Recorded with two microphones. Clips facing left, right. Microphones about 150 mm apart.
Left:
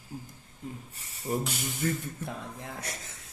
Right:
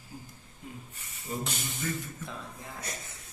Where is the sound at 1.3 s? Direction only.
55° left (ahead or behind).